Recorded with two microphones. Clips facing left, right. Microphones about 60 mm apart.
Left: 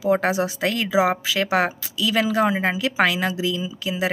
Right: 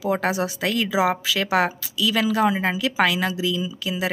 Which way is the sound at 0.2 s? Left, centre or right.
Left.